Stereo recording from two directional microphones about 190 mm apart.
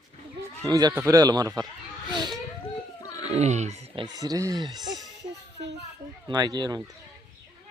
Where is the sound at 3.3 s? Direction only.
35° right (ahead or behind).